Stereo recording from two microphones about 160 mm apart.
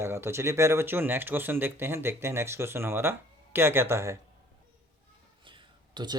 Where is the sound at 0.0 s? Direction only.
15° right (ahead or behind).